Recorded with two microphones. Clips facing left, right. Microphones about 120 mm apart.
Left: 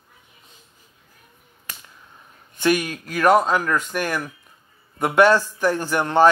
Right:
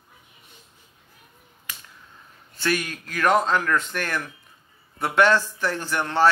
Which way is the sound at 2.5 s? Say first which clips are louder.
Left 5 dB; 15° left (ahead or behind).